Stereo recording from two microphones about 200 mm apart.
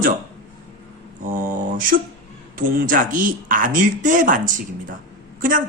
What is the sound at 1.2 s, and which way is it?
Mantra, 45° right (ahead or behind).